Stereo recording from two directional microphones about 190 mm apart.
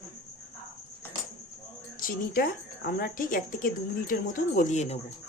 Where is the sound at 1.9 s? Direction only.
50° left (ahead or behind).